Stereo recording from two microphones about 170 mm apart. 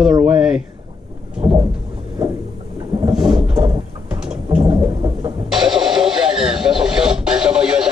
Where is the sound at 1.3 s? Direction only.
35° right (ahead or behind).